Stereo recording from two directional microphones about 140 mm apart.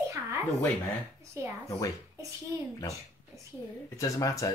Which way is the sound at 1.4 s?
20° right (ahead or behind).